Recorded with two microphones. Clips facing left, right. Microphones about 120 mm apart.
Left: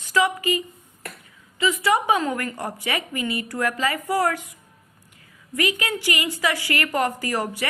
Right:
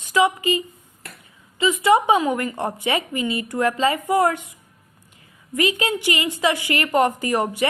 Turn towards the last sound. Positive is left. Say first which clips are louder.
# right 4 dB
turn(degrees=-20)  # may be behind; listen again after turning